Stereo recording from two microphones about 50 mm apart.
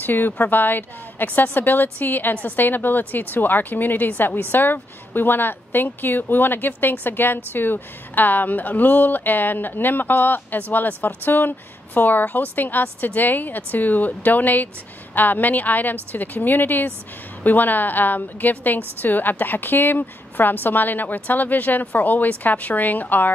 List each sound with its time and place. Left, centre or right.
0.0 s a woman's voice: left